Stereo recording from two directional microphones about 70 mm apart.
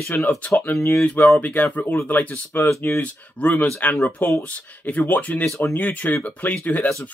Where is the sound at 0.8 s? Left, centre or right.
Left.